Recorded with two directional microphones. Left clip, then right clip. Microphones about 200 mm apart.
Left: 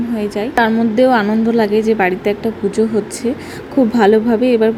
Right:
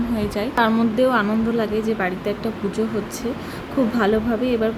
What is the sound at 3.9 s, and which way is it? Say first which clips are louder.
Speech: left 10 dB; 25° left (ahead or behind).